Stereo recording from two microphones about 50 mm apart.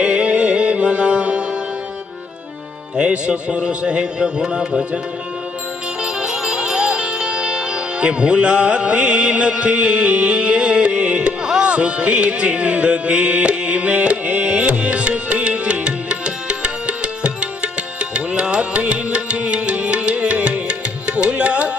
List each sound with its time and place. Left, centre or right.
0.0 s music: right
2.9 s speech: right
6.0 s music: centre